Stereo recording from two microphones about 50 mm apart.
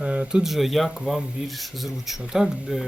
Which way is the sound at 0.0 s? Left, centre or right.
Right.